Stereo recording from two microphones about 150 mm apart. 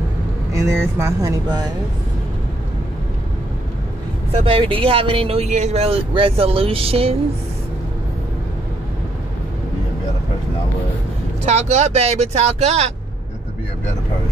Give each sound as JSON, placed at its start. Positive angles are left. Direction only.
{"t": 0.5, "sound": "speech", "side_deg": -20}
{"t": 4.5, "sound": "speech", "side_deg": -35}
{"t": 11.4, "sound": "speech", "side_deg": -50}